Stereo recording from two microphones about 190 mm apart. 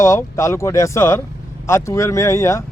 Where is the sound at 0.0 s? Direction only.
15° left (ahead or behind).